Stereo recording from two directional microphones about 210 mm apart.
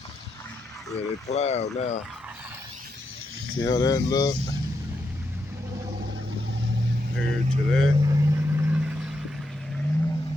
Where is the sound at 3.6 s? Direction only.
15° left (ahead or behind).